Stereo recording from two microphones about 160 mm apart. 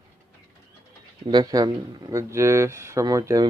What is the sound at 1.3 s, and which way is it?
Speech, 25° right (ahead or behind).